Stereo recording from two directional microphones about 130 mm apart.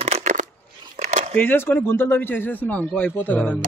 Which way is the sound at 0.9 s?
70° right (ahead or behind).